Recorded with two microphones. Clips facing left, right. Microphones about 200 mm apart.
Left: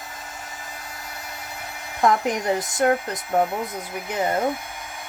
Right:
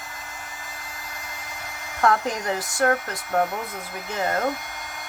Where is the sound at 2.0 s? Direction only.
20° left (ahead or behind).